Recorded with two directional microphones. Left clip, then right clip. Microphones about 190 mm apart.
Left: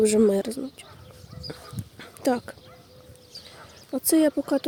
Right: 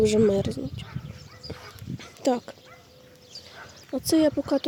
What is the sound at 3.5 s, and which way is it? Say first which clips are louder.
Speech: even; 5° left (ahead or behind).